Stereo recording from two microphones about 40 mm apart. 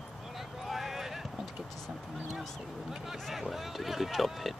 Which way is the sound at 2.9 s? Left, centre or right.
Centre.